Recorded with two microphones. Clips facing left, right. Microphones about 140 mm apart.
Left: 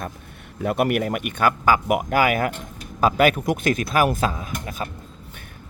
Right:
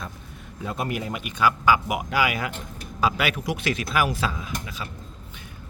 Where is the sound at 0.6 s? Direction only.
65° left (ahead or behind); by 4.8 s 45° left (ahead or behind).